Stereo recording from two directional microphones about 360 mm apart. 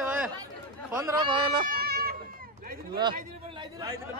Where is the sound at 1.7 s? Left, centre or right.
Right.